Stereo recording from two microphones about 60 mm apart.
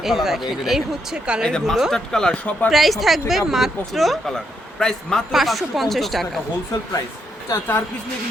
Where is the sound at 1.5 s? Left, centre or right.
Centre.